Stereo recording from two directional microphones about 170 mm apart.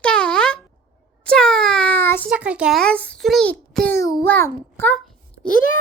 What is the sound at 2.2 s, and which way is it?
A child's voice, 5° right (ahead or behind).